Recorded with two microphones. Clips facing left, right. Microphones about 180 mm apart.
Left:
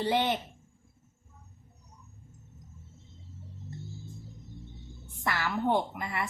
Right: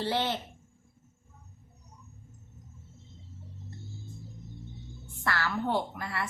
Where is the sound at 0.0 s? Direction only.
15° left (ahead or behind).